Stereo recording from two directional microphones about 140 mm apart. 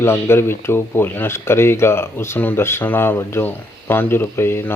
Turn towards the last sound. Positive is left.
turn(degrees=15)  # may be behind; listen again after turning